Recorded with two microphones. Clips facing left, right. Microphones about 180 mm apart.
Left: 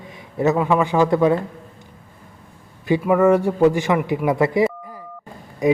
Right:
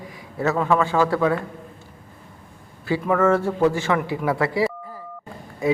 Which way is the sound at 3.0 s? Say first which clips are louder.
Left 3 dB; 15° left (ahead or behind).